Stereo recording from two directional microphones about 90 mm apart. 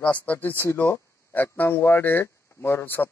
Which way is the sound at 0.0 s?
15° left (ahead or behind).